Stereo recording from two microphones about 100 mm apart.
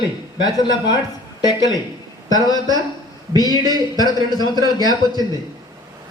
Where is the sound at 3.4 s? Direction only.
40° left (ahead or behind).